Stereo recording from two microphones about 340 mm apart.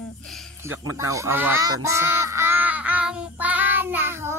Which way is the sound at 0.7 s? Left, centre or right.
Centre.